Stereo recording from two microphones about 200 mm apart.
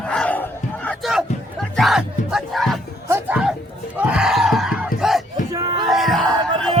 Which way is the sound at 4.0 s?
5° right (ahead or behind).